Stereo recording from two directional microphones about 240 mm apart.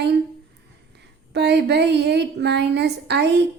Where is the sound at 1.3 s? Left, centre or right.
Right.